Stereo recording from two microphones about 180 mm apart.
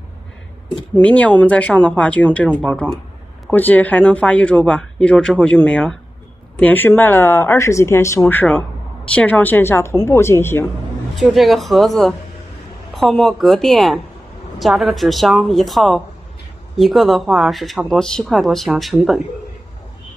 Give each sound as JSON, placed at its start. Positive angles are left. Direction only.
{"t": 0.9, "sound": "speech", "side_deg": 10}
{"t": 11.1, "sound": "speech", "side_deg": 0}